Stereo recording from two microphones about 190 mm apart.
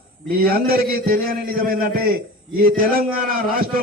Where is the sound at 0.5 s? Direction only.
55° right (ahead or behind).